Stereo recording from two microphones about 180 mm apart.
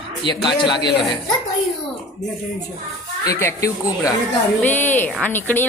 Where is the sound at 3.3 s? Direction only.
15° left (ahead or behind).